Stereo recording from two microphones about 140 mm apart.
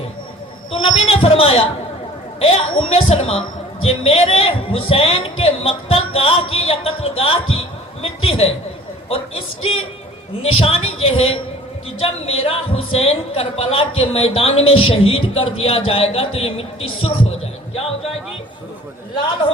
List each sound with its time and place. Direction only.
0.7 s a woman's voice: 40° left (ahead or behind)